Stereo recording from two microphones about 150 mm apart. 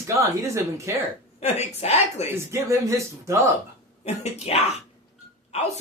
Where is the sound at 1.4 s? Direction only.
45° left (ahead or behind).